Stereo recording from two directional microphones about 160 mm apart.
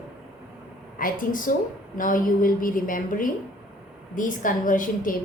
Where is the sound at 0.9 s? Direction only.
60° left (ahead or behind).